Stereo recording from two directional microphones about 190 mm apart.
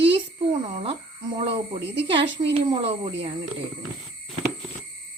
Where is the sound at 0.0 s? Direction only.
30° right (ahead or behind).